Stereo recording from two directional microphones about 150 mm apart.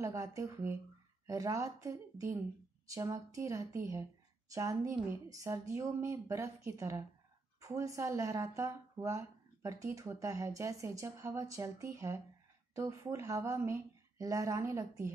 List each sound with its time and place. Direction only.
0.0 s speech: 20° right (ahead or behind)